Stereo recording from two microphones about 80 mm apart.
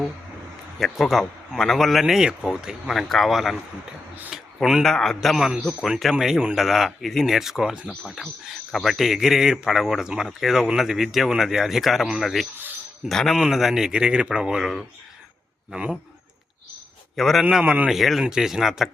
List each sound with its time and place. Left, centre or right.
0.8 s speech: centre
2.9 s speech: centre
17.2 s speech: centre
17.6 s speech: centre
17.9 s speech: centre